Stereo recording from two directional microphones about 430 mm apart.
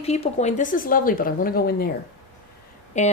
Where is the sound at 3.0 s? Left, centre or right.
Centre.